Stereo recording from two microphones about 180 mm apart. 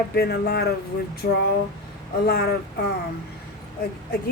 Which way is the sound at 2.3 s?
60° left (ahead or behind).